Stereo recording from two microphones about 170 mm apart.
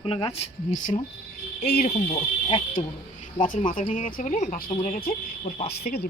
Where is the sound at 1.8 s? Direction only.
40° left (ahead or behind).